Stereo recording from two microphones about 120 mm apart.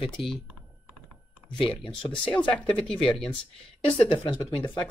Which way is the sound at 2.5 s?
10° left (ahead or behind).